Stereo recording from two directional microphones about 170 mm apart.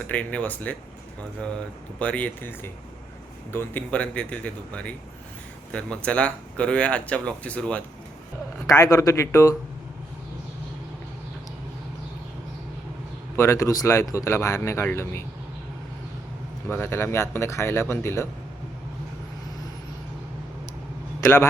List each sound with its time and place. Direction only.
0.1 s speech: 5° left (ahead or behind)
2.0 s speech: 10° left (ahead or behind)
8.6 s speech: 20° left (ahead or behind)
13.3 s speech: 15° left (ahead or behind)
16.6 s speech: 15° left (ahead or behind)
21.2 s a man's voice: 15° left (ahead or behind)